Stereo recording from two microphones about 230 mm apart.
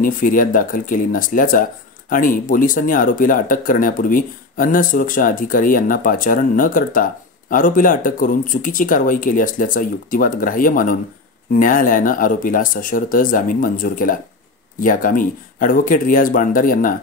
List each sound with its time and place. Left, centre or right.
0.0 s speech: left